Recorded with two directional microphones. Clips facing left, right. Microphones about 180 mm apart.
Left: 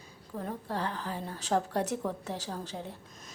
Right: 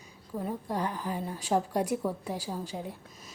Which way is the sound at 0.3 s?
10° right (ahead or behind).